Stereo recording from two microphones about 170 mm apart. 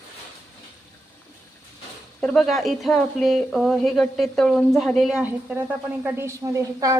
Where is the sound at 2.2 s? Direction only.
5° left (ahead or behind); by 7.0 s 20° right (ahead or behind).